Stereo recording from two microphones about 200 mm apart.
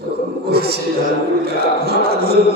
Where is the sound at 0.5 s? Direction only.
50° right (ahead or behind).